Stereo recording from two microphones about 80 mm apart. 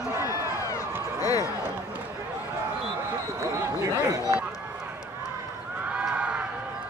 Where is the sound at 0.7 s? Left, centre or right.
Left.